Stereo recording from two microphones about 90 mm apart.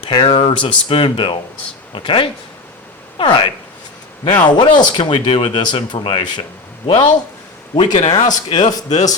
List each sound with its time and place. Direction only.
0.1 s speech: 70° left (ahead or behind)
3.2 s speech: 65° left (ahead or behind)
4.4 s speech: 55° left (ahead or behind)
6.8 s a man's voice: 90° left
7.8 s speech: 55° left (ahead or behind)